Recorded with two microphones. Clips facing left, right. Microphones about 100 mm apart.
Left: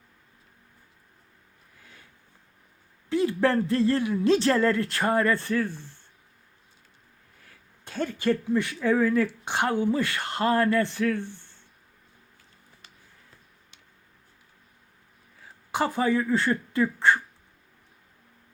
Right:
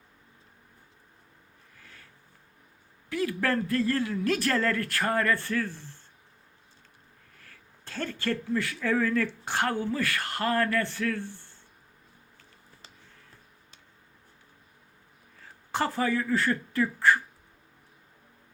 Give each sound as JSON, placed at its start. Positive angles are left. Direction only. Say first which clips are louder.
{"t": 1.8, "sound": "a sound", "louder": "even", "side_deg": 15}
{"t": 3.1, "sound": "speech", "louder": "left 5 dB", "side_deg": 25}
{"t": 7.4, "sound": "speech", "louder": "left 1 dB", "side_deg": 15}
{"t": 15.7, "sound": "speech", "louder": "left 3 dB", "side_deg": 15}